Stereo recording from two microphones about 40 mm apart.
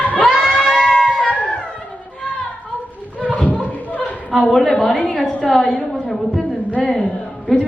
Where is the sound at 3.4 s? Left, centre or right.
Left.